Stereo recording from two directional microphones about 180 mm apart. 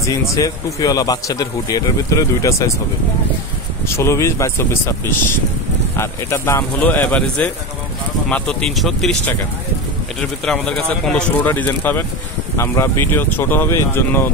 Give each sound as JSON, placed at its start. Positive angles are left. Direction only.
{"t": 0.0, "sound": "speech", "side_deg": 20}
{"t": 3.8, "sound": "speech", "side_deg": 15}
{"t": 5.9, "sound": "speech", "side_deg": 15}